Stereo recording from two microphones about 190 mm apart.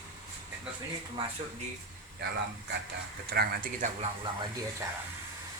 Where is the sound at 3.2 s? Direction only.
55° right (ahead or behind).